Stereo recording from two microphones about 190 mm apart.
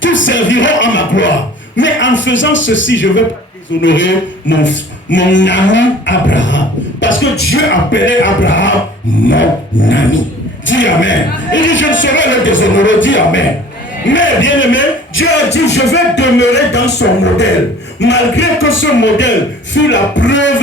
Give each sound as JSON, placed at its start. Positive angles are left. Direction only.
{"t": 0.0, "sound": "speech", "side_deg": 80}
{"t": 7.0, "sound": "speech", "side_deg": 90}
{"t": 15.7, "sound": "music", "side_deg": 65}
{"t": 18.0, "sound": "speech", "side_deg": 65}